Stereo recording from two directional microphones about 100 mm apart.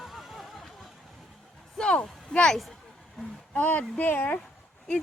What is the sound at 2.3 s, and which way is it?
Speech, 5° left (ahead or behind).